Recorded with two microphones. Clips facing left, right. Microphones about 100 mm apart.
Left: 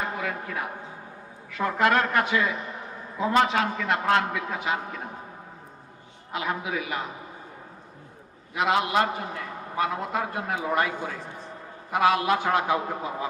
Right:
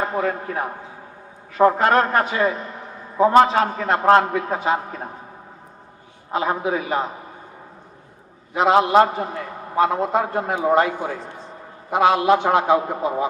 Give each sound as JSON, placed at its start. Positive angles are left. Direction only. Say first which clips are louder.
{"t": 0.0, "sound": "a man's voice", "louder": "right 8 dB", "side_deg": -40}
{"t": 6.3, "sound": "a man's voice", "louder": "right 8 dB", "side_deg": -35}
{"t": 8.5, "sound": "a man's voice", "louder": "right 8 dB", "side_deg": -35}